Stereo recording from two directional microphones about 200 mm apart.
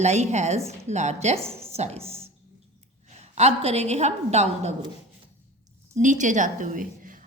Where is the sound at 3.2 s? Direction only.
35° right (ahead or behind).